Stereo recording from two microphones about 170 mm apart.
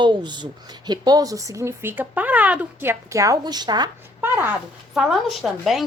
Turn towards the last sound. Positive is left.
turn(degrees=0)  # may be behind; listen again after turning